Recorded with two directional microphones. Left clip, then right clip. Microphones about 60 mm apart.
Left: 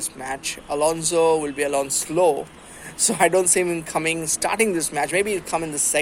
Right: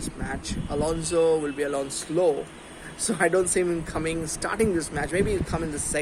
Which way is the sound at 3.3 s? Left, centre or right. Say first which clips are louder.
Left 3 dB; centre.